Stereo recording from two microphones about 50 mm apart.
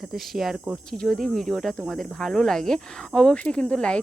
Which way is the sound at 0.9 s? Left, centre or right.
Centre.